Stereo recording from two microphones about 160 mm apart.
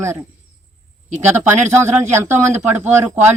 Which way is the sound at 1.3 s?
15° right (ahead or behind).